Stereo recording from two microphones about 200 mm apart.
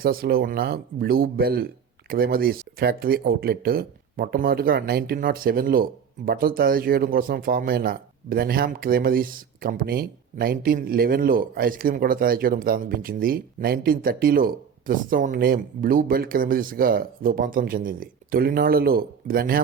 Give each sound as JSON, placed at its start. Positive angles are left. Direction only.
{"t": 0.0, "sound": "speech", "side_deg": -50}